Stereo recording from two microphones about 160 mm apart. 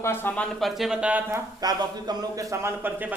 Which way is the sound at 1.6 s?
25° right (ahead or behind).